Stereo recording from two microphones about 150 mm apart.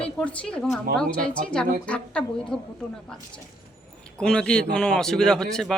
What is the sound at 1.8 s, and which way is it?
Speech, 10° left (ahead or behind).